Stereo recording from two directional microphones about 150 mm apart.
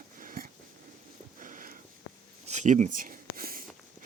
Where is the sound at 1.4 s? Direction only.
60° right (ahead or behind).